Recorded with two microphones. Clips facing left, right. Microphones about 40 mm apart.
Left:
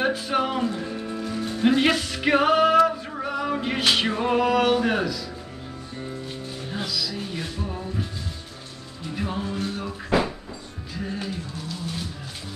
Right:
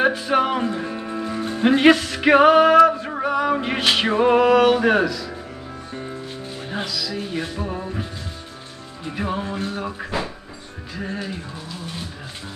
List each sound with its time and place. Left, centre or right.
0.3 s music: right
2.0 s music: centre
2.2 s music: centre
6.9 s music: centre
7.3 s music: right
11.0 s music: right